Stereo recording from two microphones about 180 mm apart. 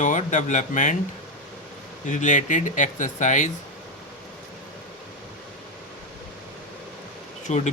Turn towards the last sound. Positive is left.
turn(degrees=40)  # may be behind; listen again after turning